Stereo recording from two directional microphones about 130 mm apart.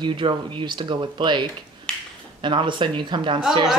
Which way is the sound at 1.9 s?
5° left (ahead or behind).